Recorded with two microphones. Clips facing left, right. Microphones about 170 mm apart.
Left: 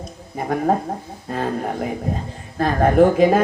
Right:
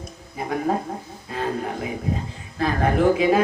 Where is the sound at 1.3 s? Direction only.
45° left (ahead or behind).